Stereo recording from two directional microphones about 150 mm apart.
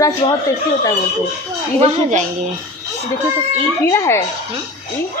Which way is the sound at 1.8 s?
50° right (ahead or behind).